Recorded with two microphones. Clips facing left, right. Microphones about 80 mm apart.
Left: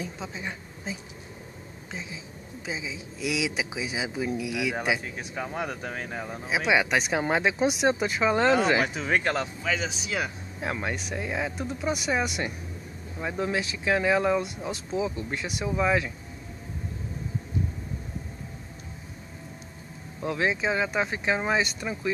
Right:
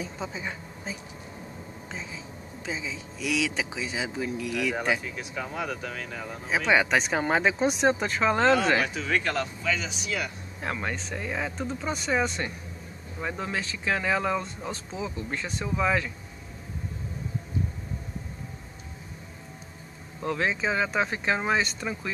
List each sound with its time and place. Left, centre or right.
0.0 s a woman's voice: centre
2.6 s speech: centre; by 6.2 s left
6.5 s speech: centre
8.9 s speech: left; by 16.1 s centre
20.2 s speech: centre